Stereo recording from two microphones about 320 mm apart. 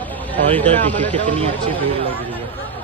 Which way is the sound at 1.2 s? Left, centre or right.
Centre.